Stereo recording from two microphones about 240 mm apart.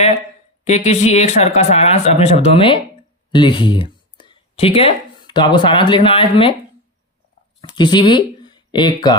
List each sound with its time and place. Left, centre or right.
0.7 s speech: left
7.6 s speech: centre